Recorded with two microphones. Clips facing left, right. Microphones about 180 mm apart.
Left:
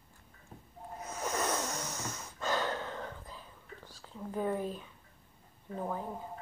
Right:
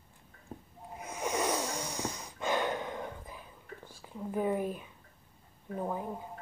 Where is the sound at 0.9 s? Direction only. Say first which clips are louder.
Right 2 dB; 10° right (ahead or behind).